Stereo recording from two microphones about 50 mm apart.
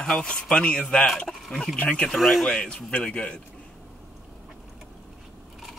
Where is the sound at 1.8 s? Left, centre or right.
Centre.